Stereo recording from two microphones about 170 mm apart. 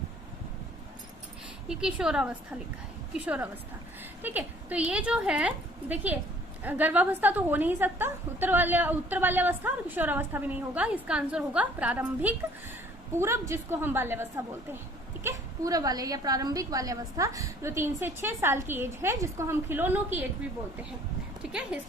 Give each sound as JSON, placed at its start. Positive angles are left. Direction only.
{"t": 1.6, "sound": "a woman's voice", "side_deg": -5}
{"t": 21.4, "sound": "speech", "side_deg": -5}